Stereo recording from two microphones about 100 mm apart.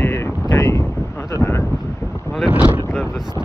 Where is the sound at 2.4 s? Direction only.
10° right (ahead or behind).